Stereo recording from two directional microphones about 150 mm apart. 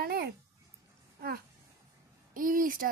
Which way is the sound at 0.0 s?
90° right.